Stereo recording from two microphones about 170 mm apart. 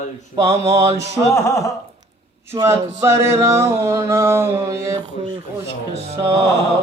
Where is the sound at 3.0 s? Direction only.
15° right (ahead or behind).